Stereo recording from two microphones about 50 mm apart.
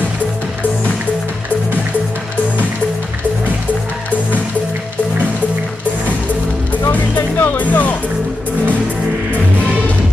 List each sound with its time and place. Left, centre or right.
6.9 s music: left